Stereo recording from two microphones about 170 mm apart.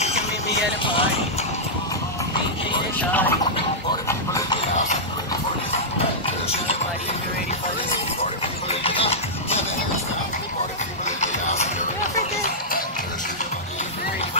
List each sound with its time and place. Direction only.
3.0 s a sound: 10° left (ahead or behind)
6.2 s music: 35° left (ahead or behind)
8.2 s music: 35° left (ahead or behind)
11.1 s music: 45° left (ahead or behind)